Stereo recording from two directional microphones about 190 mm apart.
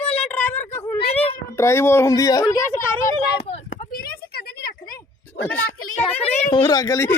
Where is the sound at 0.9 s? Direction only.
30° left (ahead or behind).